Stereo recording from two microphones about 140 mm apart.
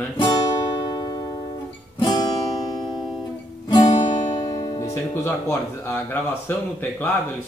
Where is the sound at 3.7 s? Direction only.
30° left (ahead or behind).